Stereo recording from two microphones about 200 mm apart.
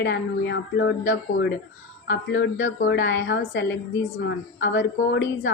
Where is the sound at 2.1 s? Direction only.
70° left (ahead or behind).